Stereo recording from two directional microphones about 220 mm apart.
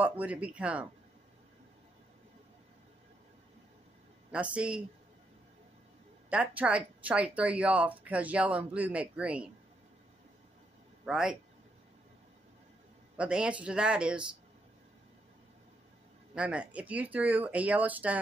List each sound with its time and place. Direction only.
0.0 s speech: 5° right (ahead or behind)
4.3 s speech: 5° right (ahead or behind)
6.3 s speech: 5° right (ahead or behind)
11.1 s speech: 5° right (ahead or behind)
13.2 s speech: 5° right (ahead or behind)
16.3 s speech: 5° right (ahead or behind)